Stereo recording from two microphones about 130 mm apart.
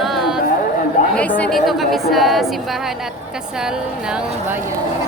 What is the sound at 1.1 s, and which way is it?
A woman's voice, 10° left (ahead or behind).